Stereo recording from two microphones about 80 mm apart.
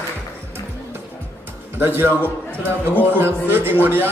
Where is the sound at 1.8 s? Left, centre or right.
Right.